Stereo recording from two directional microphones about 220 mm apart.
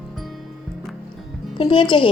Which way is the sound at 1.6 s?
20° left (ahead or behind).